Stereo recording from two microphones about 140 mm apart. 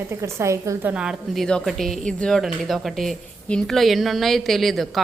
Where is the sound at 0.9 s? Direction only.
5° right (ahead or behind).